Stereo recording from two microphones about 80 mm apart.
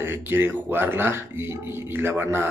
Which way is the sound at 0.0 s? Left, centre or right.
Right.